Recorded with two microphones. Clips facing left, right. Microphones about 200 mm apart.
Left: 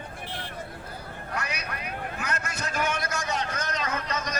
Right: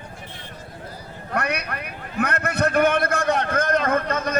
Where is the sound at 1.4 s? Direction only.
60° right (ahead or behind).